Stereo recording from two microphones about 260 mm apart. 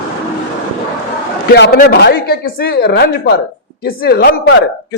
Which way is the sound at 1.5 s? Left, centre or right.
Left.